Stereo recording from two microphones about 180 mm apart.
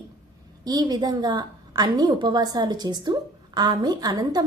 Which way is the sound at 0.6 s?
20° right (ahead or behind).